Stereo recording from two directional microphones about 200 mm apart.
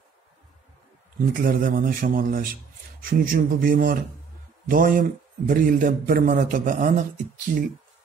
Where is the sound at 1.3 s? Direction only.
45° right (ahead or behind).